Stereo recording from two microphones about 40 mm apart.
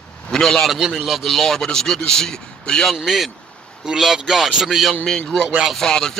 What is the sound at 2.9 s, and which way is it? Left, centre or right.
Speech, centre.